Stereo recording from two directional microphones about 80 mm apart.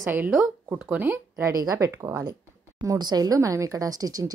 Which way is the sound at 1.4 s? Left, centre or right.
Right.